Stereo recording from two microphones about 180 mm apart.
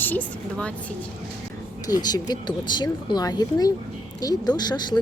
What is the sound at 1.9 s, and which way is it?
A woman's voice, 20° left (ahead or behind).